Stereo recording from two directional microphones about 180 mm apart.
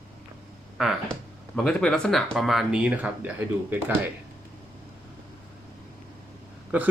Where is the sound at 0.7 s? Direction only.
Centre (ahead or behind).